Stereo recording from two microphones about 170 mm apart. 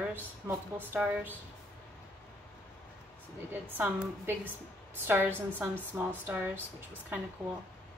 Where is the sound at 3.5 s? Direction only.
10° right (ahead or behind).